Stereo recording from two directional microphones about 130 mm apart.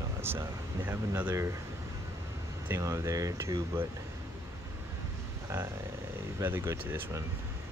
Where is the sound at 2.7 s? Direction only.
20° right (ahead or behind).